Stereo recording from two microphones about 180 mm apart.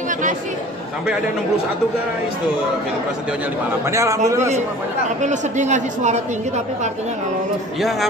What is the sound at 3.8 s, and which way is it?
Speech, 15° right (ahead or behind).